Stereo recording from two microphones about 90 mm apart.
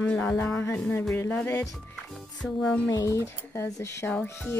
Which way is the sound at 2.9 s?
30° left (ahead or behind).